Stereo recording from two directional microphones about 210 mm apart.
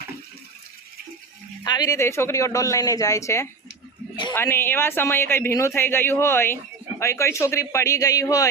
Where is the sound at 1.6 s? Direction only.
20° left (ahead or behind).